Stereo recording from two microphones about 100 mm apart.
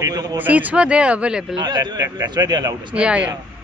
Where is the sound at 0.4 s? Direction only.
15° right (ahead or behind).